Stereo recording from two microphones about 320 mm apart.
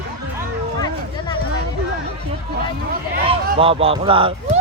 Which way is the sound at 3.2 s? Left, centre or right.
Centre.